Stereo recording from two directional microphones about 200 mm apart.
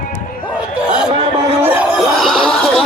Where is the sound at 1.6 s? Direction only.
10° right (ahead or behind).